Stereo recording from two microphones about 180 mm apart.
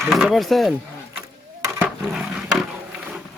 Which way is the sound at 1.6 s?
20° right (ahead or behind).